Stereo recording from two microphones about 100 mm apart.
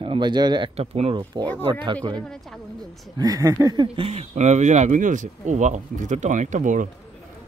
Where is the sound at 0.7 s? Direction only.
90° right.